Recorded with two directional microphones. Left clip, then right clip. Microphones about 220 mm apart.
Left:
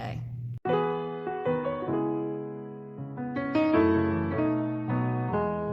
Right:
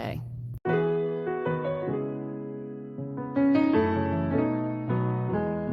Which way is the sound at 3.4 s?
Centre (ahead or behind).